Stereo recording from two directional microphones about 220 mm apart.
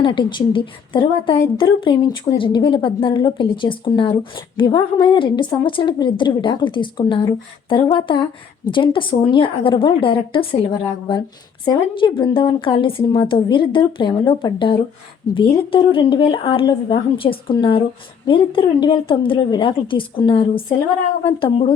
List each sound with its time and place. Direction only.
0.0 s a woman's voice: 20° left (ahead or behind)